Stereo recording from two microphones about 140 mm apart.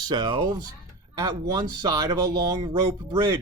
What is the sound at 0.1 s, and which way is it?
Speech, 30° right (ahead or behind).